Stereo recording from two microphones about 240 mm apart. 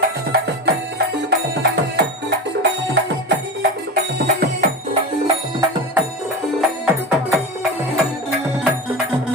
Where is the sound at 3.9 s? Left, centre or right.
Right.